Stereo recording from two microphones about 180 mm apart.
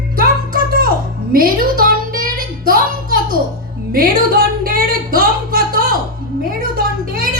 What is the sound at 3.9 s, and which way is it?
Music, 55° right (ahead or behind).